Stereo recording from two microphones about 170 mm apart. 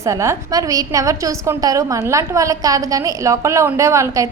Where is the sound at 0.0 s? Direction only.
20° right (ahead or behind).